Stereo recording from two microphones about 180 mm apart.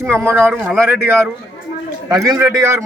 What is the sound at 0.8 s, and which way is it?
Speech, 10° right (ahead or behind).